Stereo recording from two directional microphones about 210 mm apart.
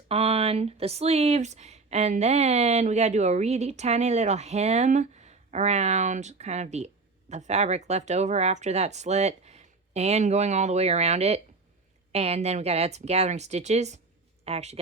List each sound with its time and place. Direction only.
0.1 s speech: 30° right (ahead or behind)